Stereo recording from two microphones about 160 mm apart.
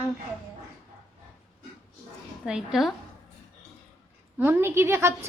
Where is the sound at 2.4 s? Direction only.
5° right (ahead or behind).